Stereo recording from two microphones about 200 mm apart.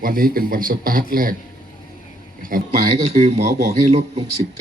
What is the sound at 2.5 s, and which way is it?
A man's voice, 45° right (ahead or behind).